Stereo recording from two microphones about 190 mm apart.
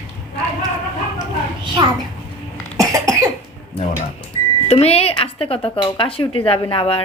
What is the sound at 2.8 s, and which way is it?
Cough, 15° right (ahead or behind).